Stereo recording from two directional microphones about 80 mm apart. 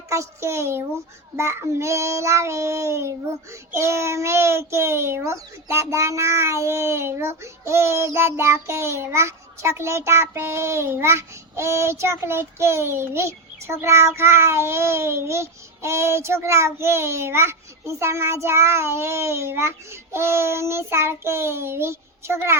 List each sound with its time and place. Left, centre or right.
0.1 s a child's voice: right